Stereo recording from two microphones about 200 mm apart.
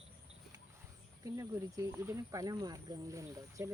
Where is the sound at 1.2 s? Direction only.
15° right (ahead or behind).